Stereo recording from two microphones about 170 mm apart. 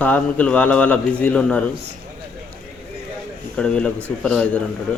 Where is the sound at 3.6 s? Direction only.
5° left (ahead or behind).